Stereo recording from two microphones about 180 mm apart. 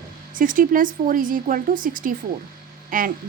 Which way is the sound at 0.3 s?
50° right (ahead or behind).